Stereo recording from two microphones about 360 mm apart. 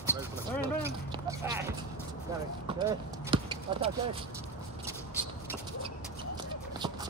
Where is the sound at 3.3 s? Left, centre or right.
Centre.